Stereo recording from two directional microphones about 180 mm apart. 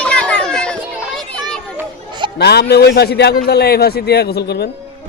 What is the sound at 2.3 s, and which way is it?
A man's voice, 65° left (ahead or behind).